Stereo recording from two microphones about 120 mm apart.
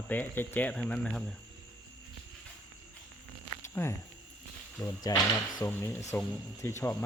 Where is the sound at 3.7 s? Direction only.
20° left (ahead or behind).